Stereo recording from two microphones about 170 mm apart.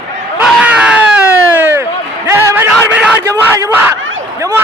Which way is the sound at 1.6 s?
15° right (ahead or behind).